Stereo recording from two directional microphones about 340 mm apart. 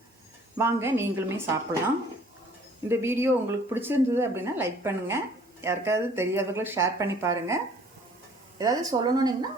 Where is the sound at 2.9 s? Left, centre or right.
Centre.